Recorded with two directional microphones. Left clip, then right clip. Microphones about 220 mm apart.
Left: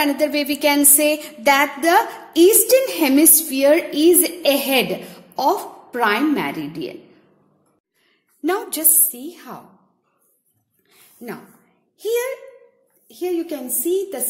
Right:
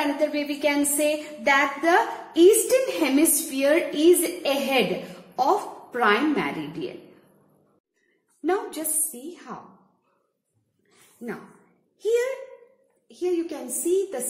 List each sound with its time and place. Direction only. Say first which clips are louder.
0.2 s a sound: left 5 dB; 45° left (ahead or behind)
5.3 s a woman's voice: left 3 dB; 35° left (ahead or behind)
8.4 s a woman's voice: left 4 dB; 40° left (ahead or behind)
12.0 s a woman's voice: left 2 dB; 35° left (ahead or behind)